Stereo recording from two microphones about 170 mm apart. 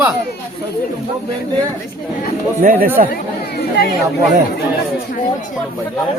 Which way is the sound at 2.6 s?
55° right (ahead or behind).